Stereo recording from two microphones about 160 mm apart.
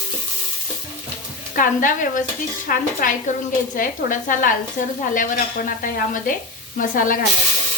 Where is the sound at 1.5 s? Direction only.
55° left (ahead or behind).